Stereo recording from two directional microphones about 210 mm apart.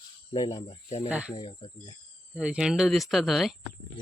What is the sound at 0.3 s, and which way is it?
Speech, 20° left (ahead or behind).